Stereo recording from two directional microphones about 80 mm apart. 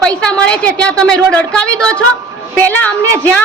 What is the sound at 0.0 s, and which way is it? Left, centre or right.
A woman's voice, centre.